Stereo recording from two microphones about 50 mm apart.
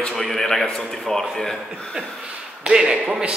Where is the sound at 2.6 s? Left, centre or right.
Centre.